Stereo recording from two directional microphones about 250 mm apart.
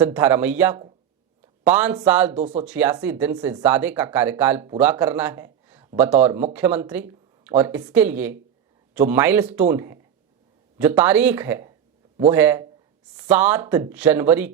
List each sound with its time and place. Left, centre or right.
0.0 s speech: centre
2.4 s speech: right
2.6 s a man's voice: centre